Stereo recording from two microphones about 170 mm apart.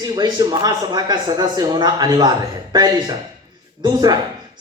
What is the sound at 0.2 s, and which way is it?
Speech, 25° right (ahead or behind).